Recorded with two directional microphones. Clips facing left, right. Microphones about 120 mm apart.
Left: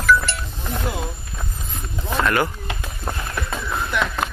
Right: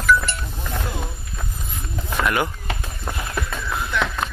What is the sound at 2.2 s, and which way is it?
Speech, 15° right (ahead or behind).